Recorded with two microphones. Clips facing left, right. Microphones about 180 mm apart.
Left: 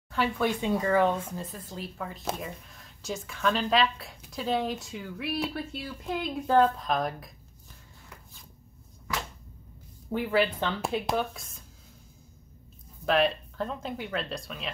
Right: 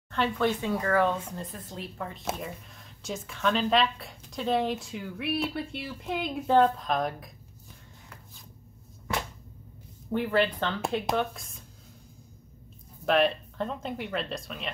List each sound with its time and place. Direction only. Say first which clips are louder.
0.1 s speech: right 1 dB; 10° left (ahead or behind)
1.3 s a woman's voice: left 1 dB; centre (ahead or behind)
10.1 s a woman's voice: even; 5° left (ahead or behind)
13.0 s a woman's voice: right 1 dB; centre (ahead or behind)